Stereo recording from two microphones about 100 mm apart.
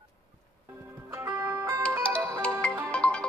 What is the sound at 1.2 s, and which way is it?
Music, 30° right (ahead or behind).